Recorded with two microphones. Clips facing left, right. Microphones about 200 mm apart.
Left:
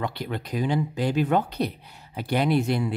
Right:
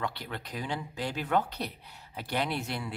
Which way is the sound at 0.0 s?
15° left (ahead or behind).